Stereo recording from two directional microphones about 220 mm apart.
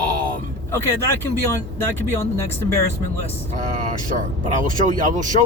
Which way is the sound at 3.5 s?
35° right (ahead or behind).